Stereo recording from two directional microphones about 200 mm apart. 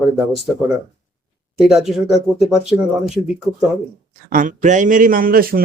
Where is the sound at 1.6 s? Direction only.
Centre (ahead or behind).